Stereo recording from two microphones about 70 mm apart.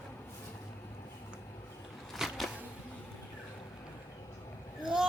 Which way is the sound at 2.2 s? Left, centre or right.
Centre.